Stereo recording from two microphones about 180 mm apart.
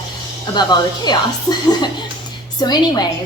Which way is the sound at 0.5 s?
25° left (ahead or behind).